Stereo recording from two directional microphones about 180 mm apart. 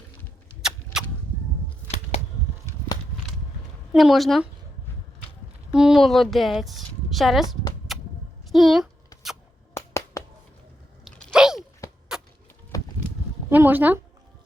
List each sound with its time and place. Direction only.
2.1 s a sound: 35° left (ahead or behind)
3.9 s a woman's voice: centre (ahead or behind)
5.7 s a woman's voice: centre (ahead or behind)
7.9 s a sound: centre (ahead or behind)
8.5 s a woman's voice: centre (ahead or behind)
9.7 s finger snapping: 15° left (ahead or behind)
11.0 s biting: centre (ahead or behind)
12.1 s wood: 5° right (ahead or behind)
12.7 s a sound: 20° left (ahead or behind)
13.5 s speech: 10° right (ahead or behind)